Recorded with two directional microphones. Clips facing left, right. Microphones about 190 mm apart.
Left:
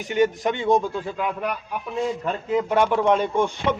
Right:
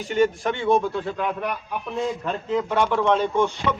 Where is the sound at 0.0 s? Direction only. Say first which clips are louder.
Even; 15° left (ahead or behind).